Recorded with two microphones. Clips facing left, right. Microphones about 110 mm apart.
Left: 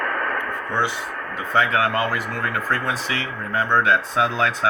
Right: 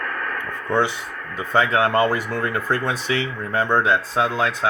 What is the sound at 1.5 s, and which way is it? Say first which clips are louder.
Speech: right 2 dB; 30° right (ahead or behind).